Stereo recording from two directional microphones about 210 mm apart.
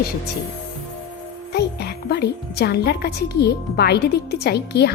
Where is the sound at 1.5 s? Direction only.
50° left (ahead or behind).